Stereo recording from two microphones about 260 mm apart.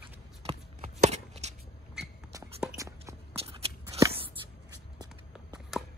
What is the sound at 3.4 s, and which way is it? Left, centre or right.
Walk, right.